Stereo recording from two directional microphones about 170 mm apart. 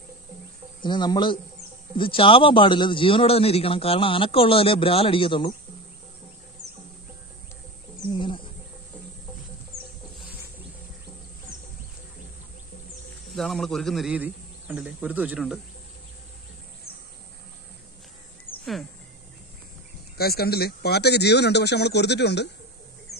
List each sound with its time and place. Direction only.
0.8 s speech: 25° left (ahead or behind)
8.1 s wild animals: 30° left (ahead or behind)
13.4 s a man's voice: centre (ahead or behind)
20.2 s speech: 65° left (ahead or behind); by 22.5 s 80° left